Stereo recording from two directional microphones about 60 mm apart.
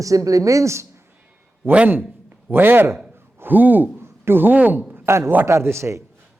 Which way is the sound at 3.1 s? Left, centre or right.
Right.